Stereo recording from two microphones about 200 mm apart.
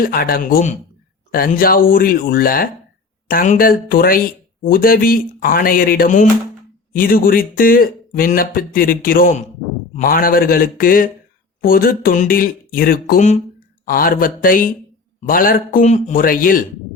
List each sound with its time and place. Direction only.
0.0 s speech: 45° left (ahead or behind)